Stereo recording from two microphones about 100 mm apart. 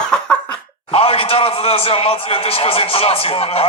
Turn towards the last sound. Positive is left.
turn(degrees=80)